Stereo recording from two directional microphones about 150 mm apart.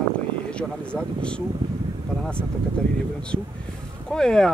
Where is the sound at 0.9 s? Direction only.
5° left (ahead or behind).